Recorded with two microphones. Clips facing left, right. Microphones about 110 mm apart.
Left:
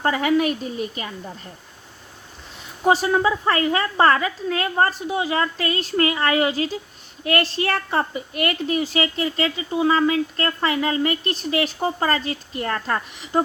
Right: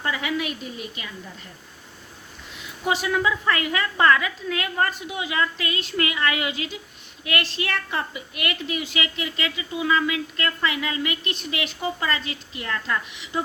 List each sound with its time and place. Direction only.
0.0 s a woman's voice: 45° left (ahead or behind)
2.6 s a woman's voice: 35° left (ahead or behind)